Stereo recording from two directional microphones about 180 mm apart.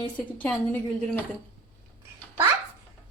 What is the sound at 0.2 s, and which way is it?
Speech, 10° left (ahead or behind).